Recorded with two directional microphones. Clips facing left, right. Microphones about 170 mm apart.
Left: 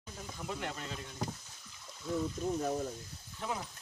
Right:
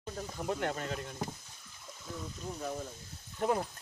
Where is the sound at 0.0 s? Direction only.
50° right (ahead or behind).